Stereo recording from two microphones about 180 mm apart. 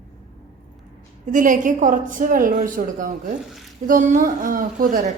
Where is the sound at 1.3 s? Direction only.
45° right (ahead or behind).